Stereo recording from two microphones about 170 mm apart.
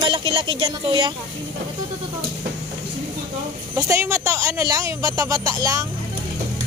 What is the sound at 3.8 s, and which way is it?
Speech, 15° right (ahead or behind).